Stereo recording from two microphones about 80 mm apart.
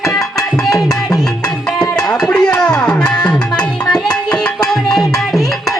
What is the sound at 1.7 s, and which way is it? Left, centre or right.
Music, centre.